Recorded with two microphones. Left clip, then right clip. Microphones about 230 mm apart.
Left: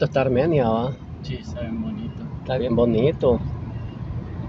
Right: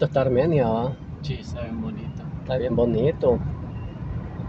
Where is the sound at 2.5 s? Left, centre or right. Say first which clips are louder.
Left 2 dB; centre.